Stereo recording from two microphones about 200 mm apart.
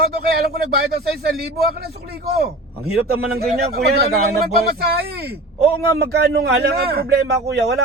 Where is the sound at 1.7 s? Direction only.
50° right (ahead or behind).